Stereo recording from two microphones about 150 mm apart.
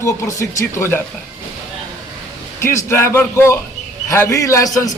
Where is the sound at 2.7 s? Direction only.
15° left (ahead or behind).